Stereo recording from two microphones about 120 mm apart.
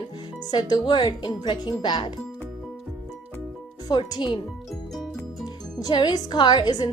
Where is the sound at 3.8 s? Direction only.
35° left (ahead or behind).